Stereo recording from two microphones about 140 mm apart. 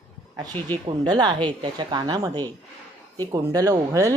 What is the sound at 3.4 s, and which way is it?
Speech, 25° right (ahead or behind).